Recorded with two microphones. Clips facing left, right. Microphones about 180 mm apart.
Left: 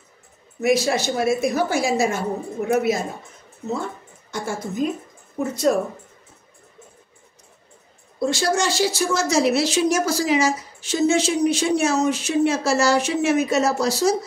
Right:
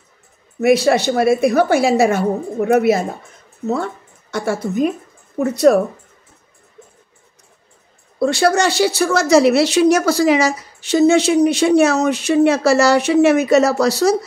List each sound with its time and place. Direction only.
0.6 s a woman's voice: 60° right (ahead or behind)
8.2 s a woman's voice: 65° right (ahead or behind)